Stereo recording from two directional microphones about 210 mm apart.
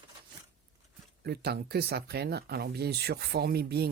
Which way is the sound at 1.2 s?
50° right (ahead or behind).